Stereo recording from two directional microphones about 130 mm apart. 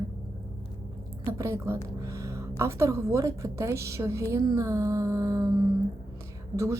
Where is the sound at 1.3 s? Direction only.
20° right (ahead or behind).